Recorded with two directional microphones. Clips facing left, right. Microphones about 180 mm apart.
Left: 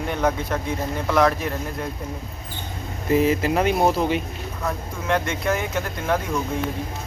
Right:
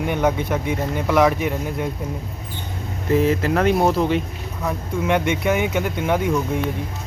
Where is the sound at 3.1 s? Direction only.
10° left (ahead or behind).